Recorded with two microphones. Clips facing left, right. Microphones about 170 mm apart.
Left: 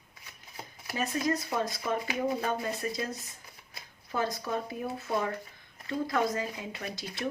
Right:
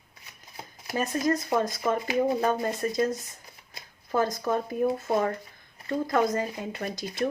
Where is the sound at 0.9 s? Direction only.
45° right (ahead or behind).